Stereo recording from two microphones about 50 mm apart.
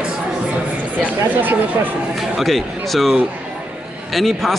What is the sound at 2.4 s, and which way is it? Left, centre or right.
Speech, centre.